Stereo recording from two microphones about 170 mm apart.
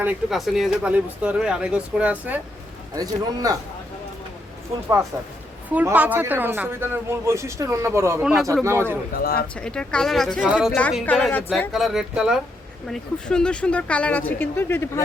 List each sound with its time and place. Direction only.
0.0 s speech: 5° right (ahead or behind)
2.9 s a man's voice: 20° right (ahead or behind)
5.1 s speech: 15° right (ahead or behind)
8.2 s speech: 5° right (ahead or behind)
9.1 s speech: 60° left (ahead or behind)
9.6 s speech: 5° left (ahead or behind)
10.7 s speech: 10° left (ahead or behind)
11.7 s speech: centre (ahead or behind); by 15.0 s 15° left (ahead or behind)